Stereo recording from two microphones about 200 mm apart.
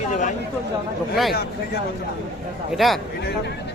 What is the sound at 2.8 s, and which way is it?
Speech, centre (ahead or behind).